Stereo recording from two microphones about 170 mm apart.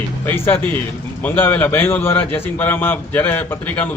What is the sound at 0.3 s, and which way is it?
Speech, 10° left (ahead or behind).